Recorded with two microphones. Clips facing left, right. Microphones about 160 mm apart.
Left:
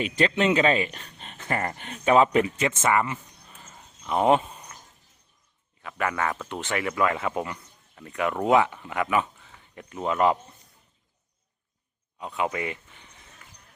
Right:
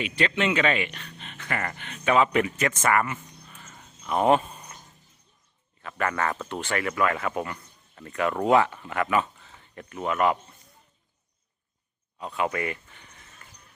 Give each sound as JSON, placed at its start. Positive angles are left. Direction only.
{"t": 0.0, "sound": "speech", "side_deg": 40}
{"t": 2.3, "sound": "speech", "side_deg": 25}
{"t": 4.0, "sound": "speech", "side_deg": 15}
{"t": 5.8, "sound": "speech", "side_deg": 10}
{"t": 10.0, "sound": "speech", "side_deg": 25}
{"t": 12.2, "sound": "speech", "side_deg": 15}